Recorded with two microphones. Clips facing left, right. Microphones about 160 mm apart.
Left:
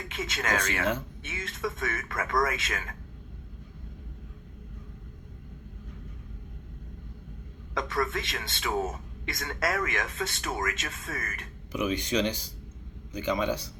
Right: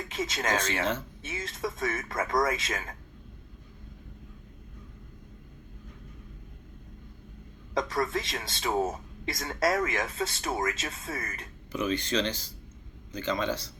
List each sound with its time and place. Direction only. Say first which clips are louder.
0.1 s speech: right 1 dB; 30° right (ahead or behind)
7.7 s speech: right 1 dB; 30° right (ahead or behind)
11.7 s speech: left 1 dB; 10° left (ahead or behind)